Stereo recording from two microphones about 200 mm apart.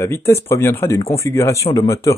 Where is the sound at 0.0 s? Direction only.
15° left (ahead or behind).